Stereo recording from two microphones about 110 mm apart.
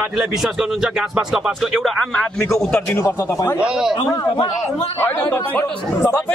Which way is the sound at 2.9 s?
20° left (ahead or behind).